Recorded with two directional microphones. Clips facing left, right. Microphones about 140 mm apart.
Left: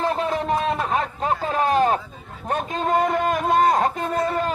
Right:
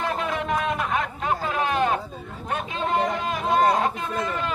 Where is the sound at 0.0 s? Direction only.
35° left (ahead or behind).